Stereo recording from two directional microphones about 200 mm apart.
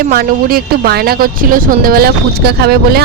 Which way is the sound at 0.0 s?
50° right (ahead or behind).